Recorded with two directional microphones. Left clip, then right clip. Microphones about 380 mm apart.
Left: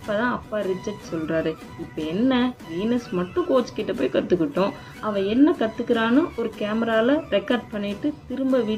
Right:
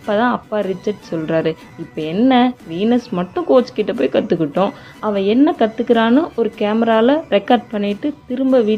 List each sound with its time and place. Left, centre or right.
0.1 s a woman's voice: right